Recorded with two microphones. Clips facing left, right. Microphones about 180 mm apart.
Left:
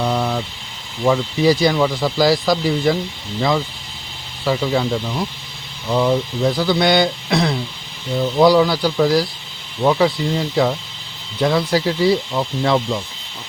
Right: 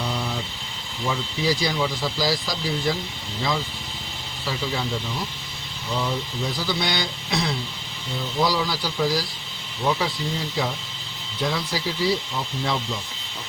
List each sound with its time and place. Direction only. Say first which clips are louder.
0.0 s vehicle: left 8 dB; 60° left (ahead or behind)
1.0 s speech: left 10 dB; 60° left (ahead or behind)
4.4 s speech: left 10 dB; 60° left (ahead or behind)
5.9 s speech: left 10 dB; 60° left (ahead or behind)